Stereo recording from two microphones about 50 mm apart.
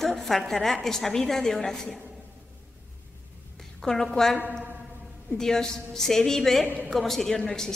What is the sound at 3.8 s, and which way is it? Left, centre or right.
A woman's voice, centre.